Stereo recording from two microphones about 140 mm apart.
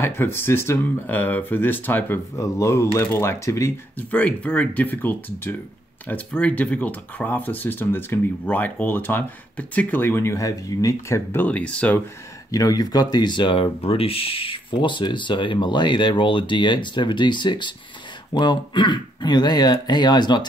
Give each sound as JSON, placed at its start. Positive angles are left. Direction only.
{"t": 0.0, "sound": "speech", "side_deg": 15}
{"t": 12.4, "sound": "speech", "side_deg": 25}